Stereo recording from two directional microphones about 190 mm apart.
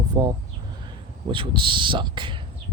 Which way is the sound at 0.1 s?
20° right (ahead or behind).